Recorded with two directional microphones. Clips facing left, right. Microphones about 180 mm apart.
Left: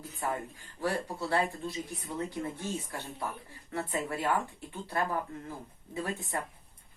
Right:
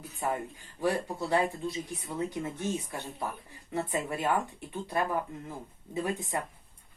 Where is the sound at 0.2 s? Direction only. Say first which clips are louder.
Right 2 dB; 20° right (ahead or behind).